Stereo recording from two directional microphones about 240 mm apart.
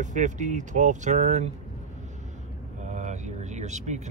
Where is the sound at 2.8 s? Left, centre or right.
Right.